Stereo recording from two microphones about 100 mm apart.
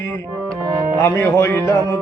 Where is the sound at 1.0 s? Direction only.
25° left (ahead or behind).